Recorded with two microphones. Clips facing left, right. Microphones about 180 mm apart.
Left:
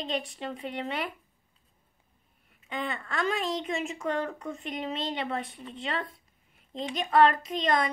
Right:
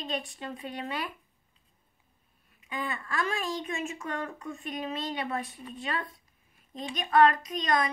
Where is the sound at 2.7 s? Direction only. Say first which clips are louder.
Left 1 dB; 25° left (ahead or behind).